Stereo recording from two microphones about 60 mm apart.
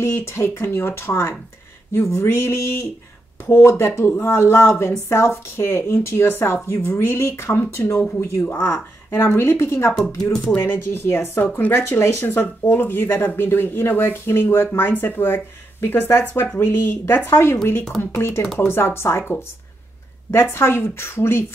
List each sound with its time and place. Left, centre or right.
0.0 s speech: left
7.2 s speech: left
7.5 s speech: left
8.5 s speech: left
9.1 s speech: left
10.5 s speech: left
12.0 s speech: left
12.4 s speech: left
20.5 s speech: left